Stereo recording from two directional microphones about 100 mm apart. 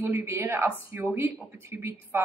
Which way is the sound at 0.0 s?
25° right (ahead or behind).